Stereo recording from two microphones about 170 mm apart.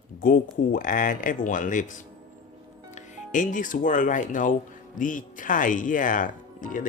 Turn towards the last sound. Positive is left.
turn(degrees=50)  # may be behind; listen again after turning